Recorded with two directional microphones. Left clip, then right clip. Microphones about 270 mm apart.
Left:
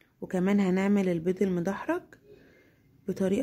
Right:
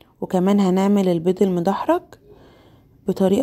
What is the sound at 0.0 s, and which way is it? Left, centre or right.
A woman's voice, centre.